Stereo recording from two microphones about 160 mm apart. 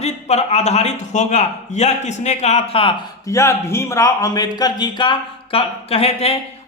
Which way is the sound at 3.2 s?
20° left (ahead or behind).